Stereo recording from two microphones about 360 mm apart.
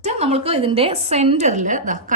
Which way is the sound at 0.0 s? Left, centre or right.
Centre.